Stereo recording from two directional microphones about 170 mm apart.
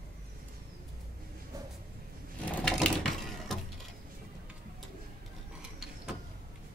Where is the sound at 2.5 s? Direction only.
5° left (ahead or behind).